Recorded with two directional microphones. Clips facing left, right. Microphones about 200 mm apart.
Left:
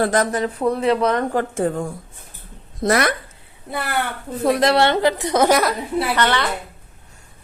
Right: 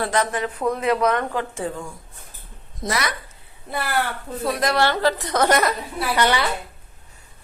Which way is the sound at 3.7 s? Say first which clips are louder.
Even; 20° left (ahead or behind).